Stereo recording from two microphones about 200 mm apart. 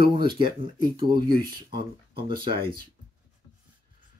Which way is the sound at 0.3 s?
25° right (ahead or behind).